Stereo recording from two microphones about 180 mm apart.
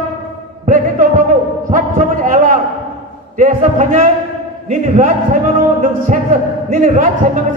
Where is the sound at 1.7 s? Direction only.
45° right (ahead or behind).